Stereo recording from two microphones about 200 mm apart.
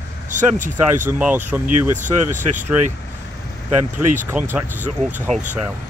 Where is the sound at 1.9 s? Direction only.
40° right (ahead or behind).